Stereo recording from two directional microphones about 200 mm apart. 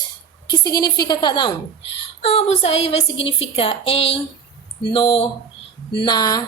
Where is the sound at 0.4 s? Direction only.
20° left (ahead or behind).